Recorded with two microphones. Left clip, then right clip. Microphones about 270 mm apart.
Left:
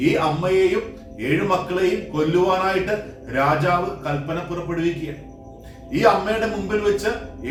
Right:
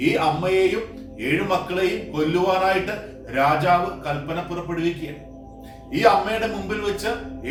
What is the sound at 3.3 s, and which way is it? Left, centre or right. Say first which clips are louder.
Speech: right 1 dB; centre.